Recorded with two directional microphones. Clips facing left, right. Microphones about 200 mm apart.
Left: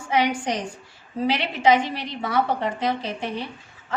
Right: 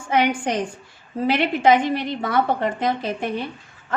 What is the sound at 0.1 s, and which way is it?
A woman's voice, 50° right (ahead or behind).